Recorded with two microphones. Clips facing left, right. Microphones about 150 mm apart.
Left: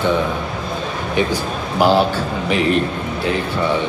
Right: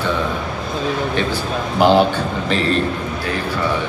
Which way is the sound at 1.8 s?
5° left (ahead or behind).